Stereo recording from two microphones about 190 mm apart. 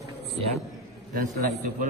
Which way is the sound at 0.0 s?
60° left (ahead or behind).